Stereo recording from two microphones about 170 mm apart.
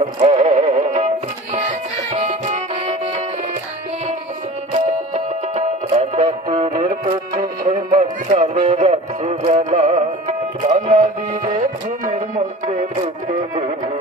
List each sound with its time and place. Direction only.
0.0 s music: 35° right (ahead or behind)
2.1 s music: 40° right (ahead or behind)
4.7 s music: 40° right (ahead or behind)